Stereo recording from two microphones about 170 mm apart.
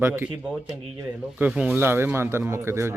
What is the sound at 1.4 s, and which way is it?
Speech, 5° right (ahead or behind).